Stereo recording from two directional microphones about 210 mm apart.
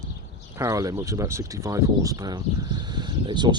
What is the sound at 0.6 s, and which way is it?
Speech, 15° right (ahead or behind).